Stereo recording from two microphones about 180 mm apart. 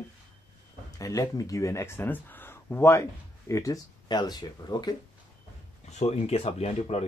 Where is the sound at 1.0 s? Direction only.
20° left (ahead or behind).